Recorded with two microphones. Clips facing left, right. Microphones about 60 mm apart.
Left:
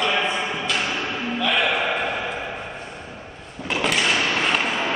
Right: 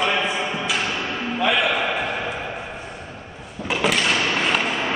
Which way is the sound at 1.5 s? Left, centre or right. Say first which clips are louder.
Even; centre.